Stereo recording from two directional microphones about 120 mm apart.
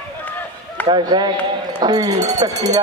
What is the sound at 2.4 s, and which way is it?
Speech, 30° right (ahead or behind).